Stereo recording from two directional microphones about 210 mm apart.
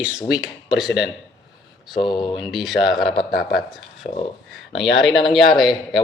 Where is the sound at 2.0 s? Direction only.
20° left (ahead or behind).